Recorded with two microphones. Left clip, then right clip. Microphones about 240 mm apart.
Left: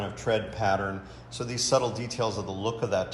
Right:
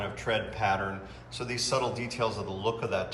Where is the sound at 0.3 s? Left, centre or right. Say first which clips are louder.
Left 2 dB; centre.